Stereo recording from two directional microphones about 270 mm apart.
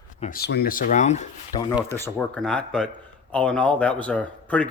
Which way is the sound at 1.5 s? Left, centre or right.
Centre.